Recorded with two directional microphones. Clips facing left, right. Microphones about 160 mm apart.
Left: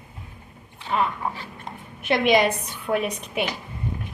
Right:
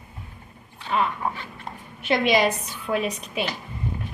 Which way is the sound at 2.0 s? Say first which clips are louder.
Left 1 dB; 55° left (ahead or behind).